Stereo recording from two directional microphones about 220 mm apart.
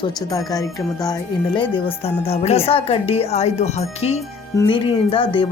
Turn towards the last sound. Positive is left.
turn(degrees=25)  # may be behind; listen again after turning